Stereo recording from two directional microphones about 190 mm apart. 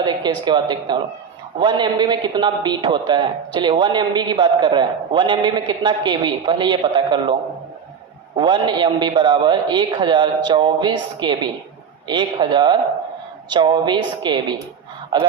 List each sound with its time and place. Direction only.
0.0 s a man's voice: 25° right (ahead or behind)
8.4 s a man's voice: 25° right (ahead or behind)